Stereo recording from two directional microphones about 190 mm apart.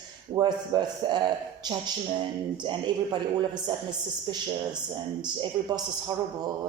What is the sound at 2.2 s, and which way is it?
Speech, 25° right (ahead or behind).